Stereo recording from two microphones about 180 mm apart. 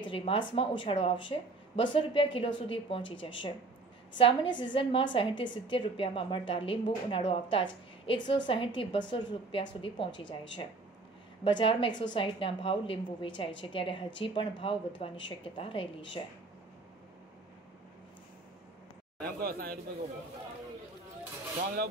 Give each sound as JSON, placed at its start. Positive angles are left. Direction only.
{"t": 0.0, "sound": "a woman's voice", "side_deg": 30}
{"t": 11.4, "sound": "a woman's voice", "side_deg": 30}
{"t": 19.4, "sound": "speech", "side_deg": -55}